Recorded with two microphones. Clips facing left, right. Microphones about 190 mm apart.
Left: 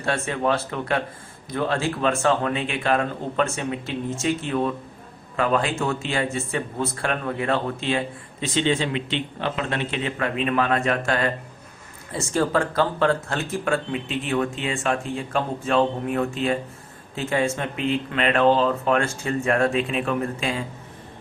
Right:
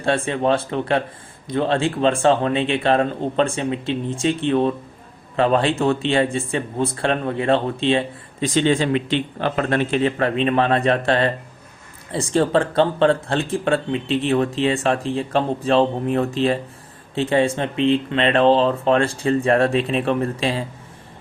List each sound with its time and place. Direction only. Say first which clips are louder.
0.0 s speech: right 4 dB; 30° right (ahead or behind)
8.4 s a man's voice: right 4 dB; 50° right (ahead or behind)
10.2 s speech: right 4 dB; 30° right (ahead or behind)